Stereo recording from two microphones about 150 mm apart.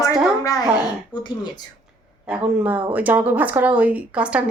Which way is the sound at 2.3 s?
5° right (ahead or behind).